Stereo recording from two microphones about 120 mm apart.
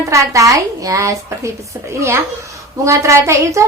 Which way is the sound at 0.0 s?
25° right (ahead or behind).